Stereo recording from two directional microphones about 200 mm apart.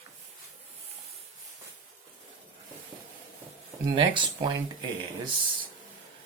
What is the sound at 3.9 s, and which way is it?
Speech, 25° right (ahead or behind).